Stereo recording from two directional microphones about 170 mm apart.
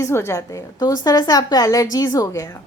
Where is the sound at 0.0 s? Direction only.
15° left (ahead or behind).